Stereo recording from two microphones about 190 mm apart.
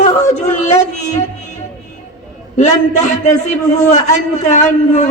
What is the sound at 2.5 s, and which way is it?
A man's voice, 40° left (ahead or behind).